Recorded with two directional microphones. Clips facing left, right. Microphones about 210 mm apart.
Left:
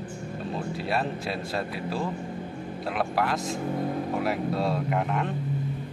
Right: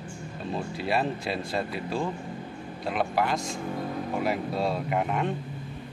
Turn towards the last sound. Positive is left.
turn(degrees=-5)  # may be behind; listen again after turning